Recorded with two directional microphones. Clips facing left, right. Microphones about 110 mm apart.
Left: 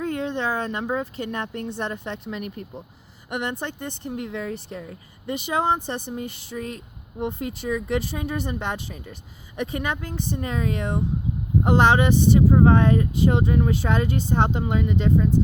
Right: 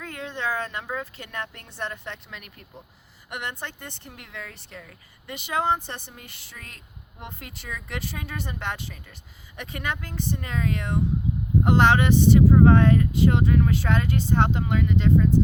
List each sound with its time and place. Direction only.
0.0 s speech: 25° left (ahead or behind)